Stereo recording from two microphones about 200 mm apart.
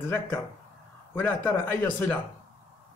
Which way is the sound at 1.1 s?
10° left (ahead or behind).